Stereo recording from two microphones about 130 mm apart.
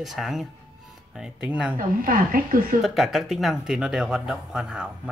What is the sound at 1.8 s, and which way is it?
Speech, 90° right.